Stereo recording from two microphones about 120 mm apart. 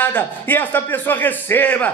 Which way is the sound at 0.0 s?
15° left (ahead or behind).